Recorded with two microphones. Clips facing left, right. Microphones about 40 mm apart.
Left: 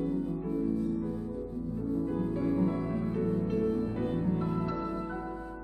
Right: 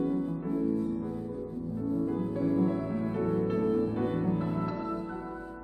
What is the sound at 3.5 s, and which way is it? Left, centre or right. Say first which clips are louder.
Music: right 2 dB; centre.